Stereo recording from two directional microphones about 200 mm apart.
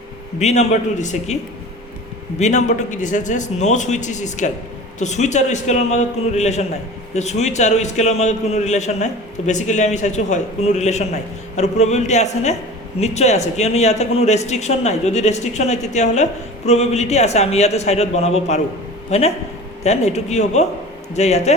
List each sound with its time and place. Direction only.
0.3 s a man's voice: 35° left (ahead or behind)
2.4 s a man's voice: 35° left (ahead or behind)